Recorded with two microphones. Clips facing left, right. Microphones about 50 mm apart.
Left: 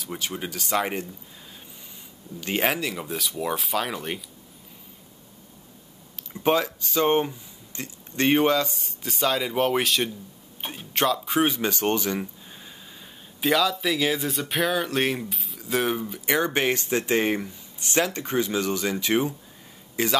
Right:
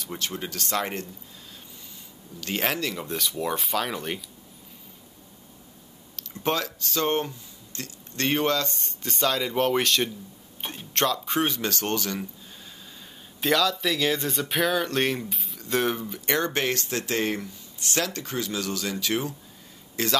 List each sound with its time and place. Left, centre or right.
0.0 s speech: centre
2.4 s speech: centre
6.1 s speech: centre
13.4 s speech: centre